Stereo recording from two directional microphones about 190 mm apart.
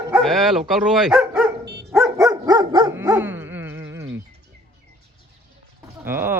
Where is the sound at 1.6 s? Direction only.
60° right (ahead or behind).